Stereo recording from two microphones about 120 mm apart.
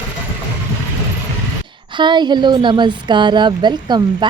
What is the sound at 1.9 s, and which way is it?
A woman's voice, 40° right (ahead or behind).